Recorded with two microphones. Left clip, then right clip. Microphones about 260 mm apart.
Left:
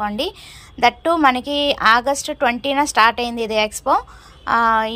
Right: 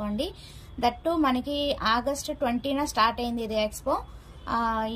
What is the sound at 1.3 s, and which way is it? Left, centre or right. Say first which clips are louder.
A woman's voice: left 9 dB; centre.